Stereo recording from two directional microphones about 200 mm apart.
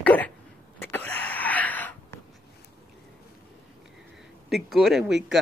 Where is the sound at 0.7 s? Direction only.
10° left (ahead or behind).